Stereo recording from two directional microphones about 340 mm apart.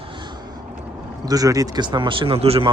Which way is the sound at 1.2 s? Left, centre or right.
Centre.